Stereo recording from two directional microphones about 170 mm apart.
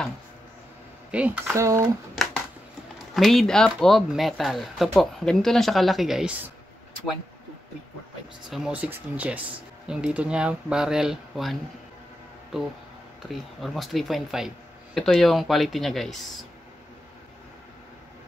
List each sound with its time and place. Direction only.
1.1 s speech: 10° right (ahead or behind)
2.2 s a sound: centre (ahead or behind)
3.2 s speech: centre (ahead or behind)
8.5 s speech: 5° right (ahead or behind)
13.3 s speech: centre (ahead or behind)